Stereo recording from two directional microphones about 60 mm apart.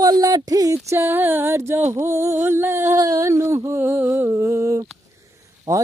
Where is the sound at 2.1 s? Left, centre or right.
Right.